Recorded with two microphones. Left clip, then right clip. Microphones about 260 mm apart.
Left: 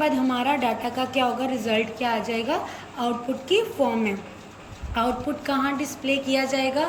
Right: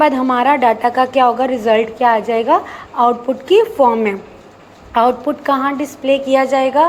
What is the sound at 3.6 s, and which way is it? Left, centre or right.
Speech, right.